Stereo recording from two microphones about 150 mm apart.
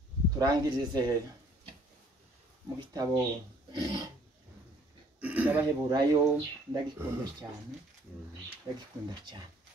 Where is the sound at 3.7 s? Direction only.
30° right (ahead or behind).